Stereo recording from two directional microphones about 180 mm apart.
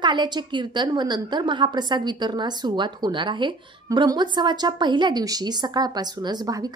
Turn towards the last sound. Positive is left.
turn(degrees=-20)  # may be behind; listen again after turning